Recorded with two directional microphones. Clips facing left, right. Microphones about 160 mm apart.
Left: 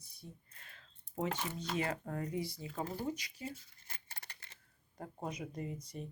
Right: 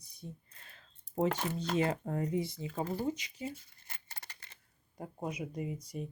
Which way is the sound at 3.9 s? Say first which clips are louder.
Right 2 dB; 85° right.